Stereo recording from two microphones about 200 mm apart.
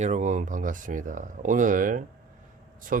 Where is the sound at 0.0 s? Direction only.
35° right (ahead or behind).